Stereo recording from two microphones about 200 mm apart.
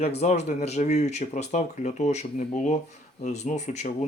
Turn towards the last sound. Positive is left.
turn(degrees=35)  # may be behind; listen again after turning